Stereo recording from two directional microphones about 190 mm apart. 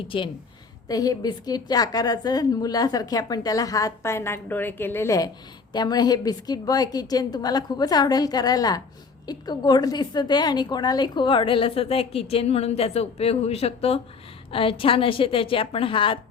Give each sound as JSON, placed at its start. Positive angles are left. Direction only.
{"t": 0.1, "sound": "a woman's voice", "side_deg": 30}